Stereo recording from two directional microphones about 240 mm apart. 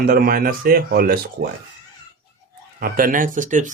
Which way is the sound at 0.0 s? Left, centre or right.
Right.